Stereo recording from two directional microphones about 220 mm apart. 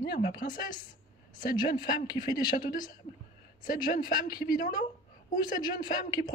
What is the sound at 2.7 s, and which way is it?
A woman's voice, 40° left (ahead or behind).